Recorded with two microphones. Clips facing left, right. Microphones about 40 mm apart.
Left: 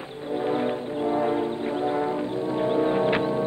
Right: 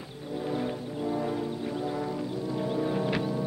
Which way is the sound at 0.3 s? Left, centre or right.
Left.